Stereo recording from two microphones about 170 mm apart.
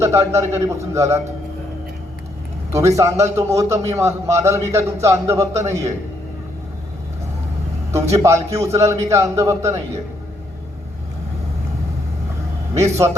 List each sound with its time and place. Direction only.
0.0 s a man's voice: 15° right (ahead or behind)
2.7 s a man's voice: 15° right (ahead or behind)
7.9 s a man's voice: 15° right (ahead or behind)
12.7 s a man's voice: 15° right (ahead or behind)